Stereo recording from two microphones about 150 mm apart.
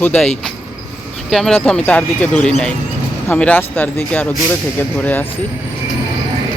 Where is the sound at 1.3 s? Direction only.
Centre (ahead or behind).